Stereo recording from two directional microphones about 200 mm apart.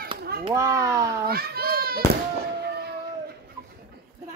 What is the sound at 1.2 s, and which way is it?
Children playing, 50° right (ahead or behind).